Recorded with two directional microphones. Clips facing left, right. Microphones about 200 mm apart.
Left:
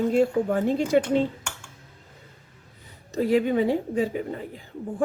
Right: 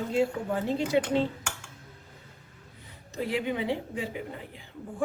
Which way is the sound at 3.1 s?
45° left (ahead or behind).